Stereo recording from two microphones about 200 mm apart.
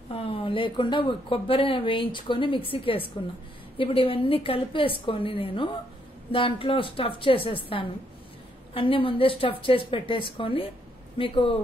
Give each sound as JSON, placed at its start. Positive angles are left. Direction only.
{"t": 0.1, "sound": "speech", "side_deg": 25}